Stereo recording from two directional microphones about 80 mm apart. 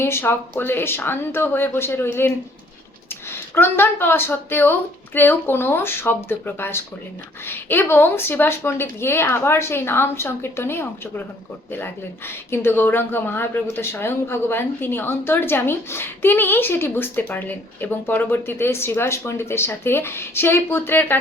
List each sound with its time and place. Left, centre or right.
0.0 s speech: left
12.5 s speech: left